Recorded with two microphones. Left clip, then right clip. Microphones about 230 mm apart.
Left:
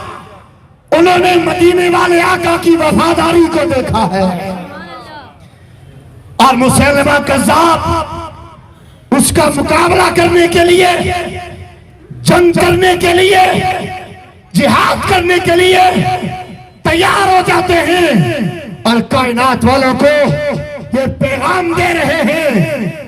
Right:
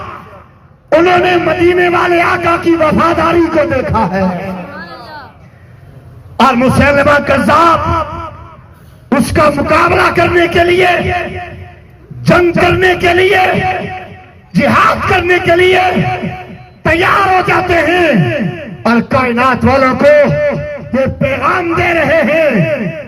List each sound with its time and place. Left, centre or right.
0.9 s speech: left
4.8 s music: centre
6.3 s a man's voice: left